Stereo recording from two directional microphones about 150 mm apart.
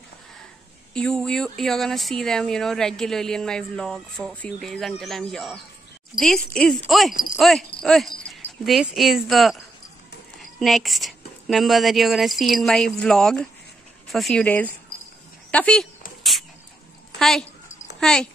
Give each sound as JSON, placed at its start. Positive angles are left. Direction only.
{"t": 0.9, "sound": "speech", "side_deg": 5}
{"t": 10.6, "sound": "speech", "side_deg": 0}
{"t": 16.2, "sound": "a sound", "side_deg": 0}
{"t": 17.2, "sound": "speech", "side_deg": 0}